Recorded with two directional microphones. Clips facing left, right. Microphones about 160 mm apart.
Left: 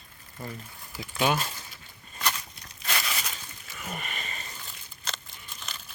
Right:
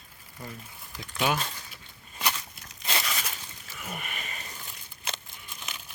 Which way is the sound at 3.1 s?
Centre (ahead or behind).